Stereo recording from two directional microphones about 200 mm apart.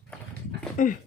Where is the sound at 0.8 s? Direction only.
40° left (ahead or behind).